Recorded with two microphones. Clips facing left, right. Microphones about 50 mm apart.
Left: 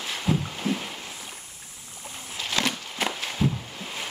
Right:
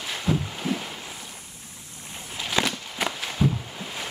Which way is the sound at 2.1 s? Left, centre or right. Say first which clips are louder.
Right 2 dB; centre.